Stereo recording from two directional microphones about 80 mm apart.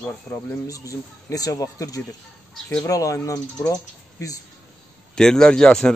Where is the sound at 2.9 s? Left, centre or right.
Left.